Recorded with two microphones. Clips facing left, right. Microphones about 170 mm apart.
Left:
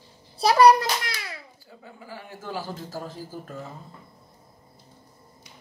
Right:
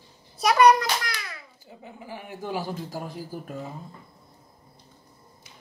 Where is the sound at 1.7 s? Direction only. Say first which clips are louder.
Right 3 dB; 20° right (ahead or behind).